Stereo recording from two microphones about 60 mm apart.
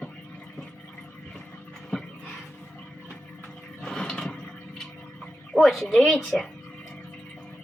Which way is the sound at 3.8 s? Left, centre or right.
Centre.